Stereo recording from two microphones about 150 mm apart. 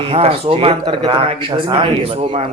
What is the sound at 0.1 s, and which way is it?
Speech, 40° right (ahead or behind).